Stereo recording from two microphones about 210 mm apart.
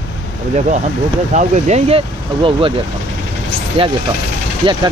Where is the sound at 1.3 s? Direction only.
30° right (ahead or behind).